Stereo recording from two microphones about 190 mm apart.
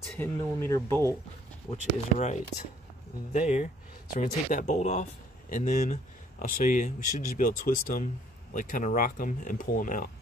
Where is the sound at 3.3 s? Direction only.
40° left (ahead or behind).